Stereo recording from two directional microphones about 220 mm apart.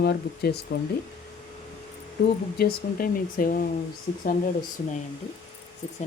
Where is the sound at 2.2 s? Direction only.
50° left (ahead or behind).